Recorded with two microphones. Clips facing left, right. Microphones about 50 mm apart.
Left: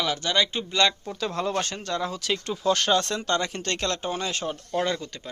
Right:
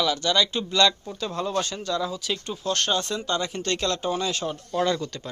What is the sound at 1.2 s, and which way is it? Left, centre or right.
Speech, left.